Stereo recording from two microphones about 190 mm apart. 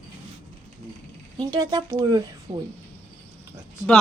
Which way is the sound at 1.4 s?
20° right (ahead or behind).